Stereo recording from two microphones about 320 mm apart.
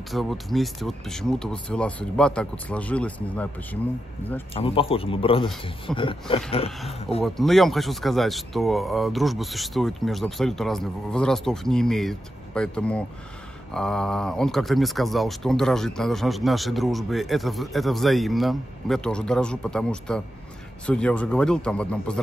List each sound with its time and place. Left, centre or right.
0.1 s speech: centre
4.6 s a man's voice: centre
7.2 s speech: centre